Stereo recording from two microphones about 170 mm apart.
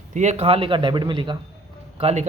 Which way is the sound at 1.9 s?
40° right (ahead or behind).